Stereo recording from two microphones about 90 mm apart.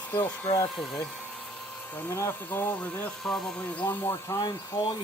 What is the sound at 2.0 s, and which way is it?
Speech, 35° left (ahead or behind).